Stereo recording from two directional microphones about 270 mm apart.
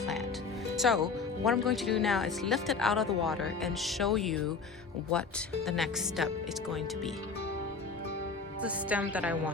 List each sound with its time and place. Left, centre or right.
0.8 s speech: centre
5.6 s speech: centre
8.6 s speech: centre